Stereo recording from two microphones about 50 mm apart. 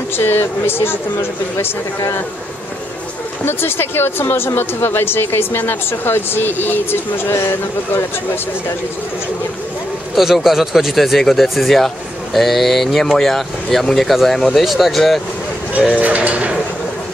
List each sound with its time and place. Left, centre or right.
0.2 s speech: left
3.4 s speech: left
10.1 s speech: centre
16.0 s speech: right